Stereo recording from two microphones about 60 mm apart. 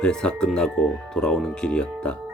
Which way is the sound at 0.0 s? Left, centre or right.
Centre.